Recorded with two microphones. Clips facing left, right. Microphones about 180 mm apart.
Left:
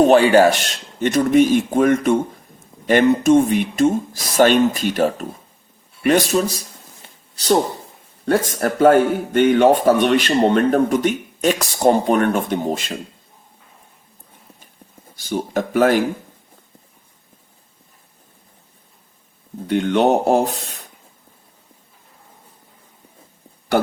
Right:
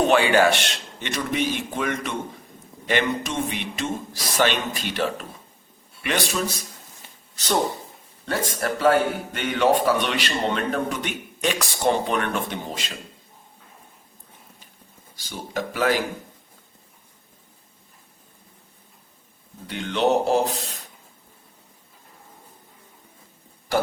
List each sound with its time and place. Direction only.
0.0 s a man's voice: 40° left (ahead or behind)
15.1 s speech: 50° left (ahead or behind)
19.6 s a man's voice: 50° left (ahead or behind)